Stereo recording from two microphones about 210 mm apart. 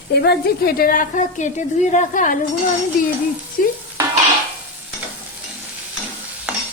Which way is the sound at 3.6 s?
40° left (ahead or behind).